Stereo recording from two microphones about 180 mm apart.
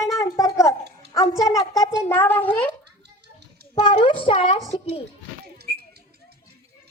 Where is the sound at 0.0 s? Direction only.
15° left (ahead or behind).